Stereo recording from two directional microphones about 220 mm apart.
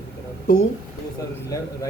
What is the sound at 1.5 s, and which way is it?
Speech, 15° left (ahead or behind).